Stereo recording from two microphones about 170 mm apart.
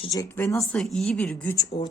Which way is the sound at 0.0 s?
20° left (ahead or behind).